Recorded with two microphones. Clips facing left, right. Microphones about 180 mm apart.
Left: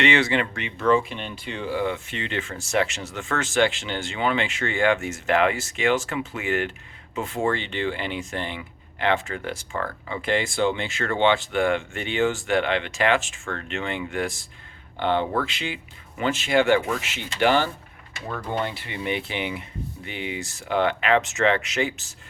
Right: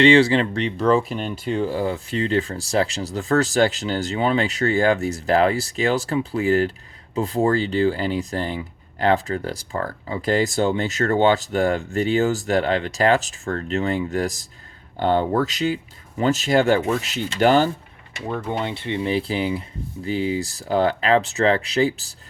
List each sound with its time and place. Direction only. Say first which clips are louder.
0.0 s speech: right 7 dB; 30° right (ahead or behind)
18.3 s speech: right 3 dB; 25° right (ahead or behind)